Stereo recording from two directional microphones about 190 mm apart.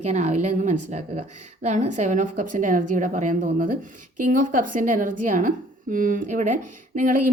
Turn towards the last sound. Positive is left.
turn(degrees=-40)  # may be behind; listen again after turning